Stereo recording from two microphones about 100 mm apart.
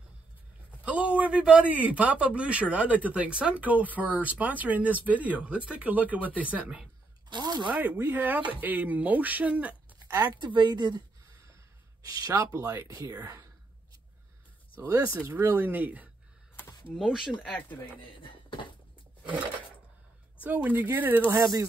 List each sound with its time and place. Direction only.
0.8 s speech: 10° right (ahead or behind)
7.2 s a sound: 45° right (ahead or behind)
7.6 s speech: 15° right (ahead or behind)
10.1 s speech: 40° right (ahead or behind)
11.2 s a sound: 30° right (ahead or behind)
12.1 s speech: 40° right (ahead or behind)
15.2 s speech: 20° right (ahead or behind)
16.5 s a sound: 20° left (ahead or behind)
16.9 s speech: 5° right (ahead or behind)
17.6 s speech: 15° left (ahead or behind)
18.2 s a sound: 55° left (ahead or behind)
20.4 s speech: 15° right (ahead or behind)
21.3 s speech: 35° right (ahead or behind)